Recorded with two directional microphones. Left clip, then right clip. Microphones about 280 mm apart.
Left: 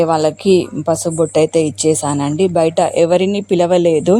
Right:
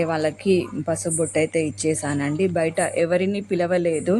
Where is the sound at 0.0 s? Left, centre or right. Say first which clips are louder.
Left 9 dB; centre.